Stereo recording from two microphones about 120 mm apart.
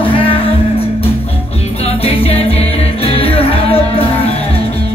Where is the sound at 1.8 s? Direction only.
55° left (ahead or behind).